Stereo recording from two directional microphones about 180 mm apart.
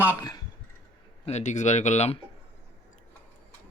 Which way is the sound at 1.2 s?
40° left (ahead or behind).